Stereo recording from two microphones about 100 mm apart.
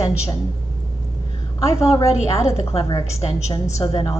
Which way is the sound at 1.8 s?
30° left (ahead or behind).